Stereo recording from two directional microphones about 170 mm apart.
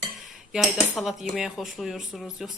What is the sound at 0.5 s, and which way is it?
A woman's voice, centre (ahead or behind).